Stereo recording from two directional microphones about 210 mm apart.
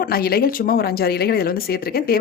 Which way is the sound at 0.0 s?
45° left (ahead or behind).